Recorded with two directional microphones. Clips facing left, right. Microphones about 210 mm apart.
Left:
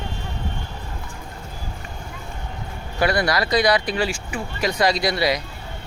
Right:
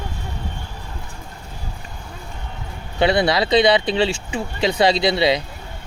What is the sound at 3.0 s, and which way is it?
Speech, 25° right (ahead or behind).